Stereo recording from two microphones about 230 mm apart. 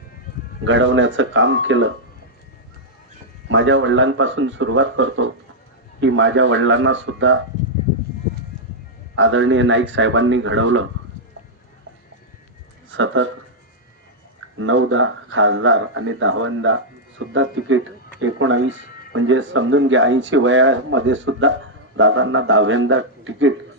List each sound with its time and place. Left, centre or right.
0.6 s speech: right
3.5 s speech: right
9.1 s speech: right
12.9 s speech: right
14.6 s speech: right
18.8 s a sound: left
19.1 s speech: right